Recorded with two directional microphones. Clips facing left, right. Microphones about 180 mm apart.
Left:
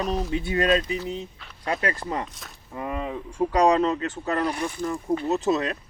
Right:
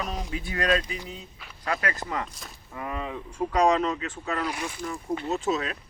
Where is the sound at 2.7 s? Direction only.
30° left (ahead or behind).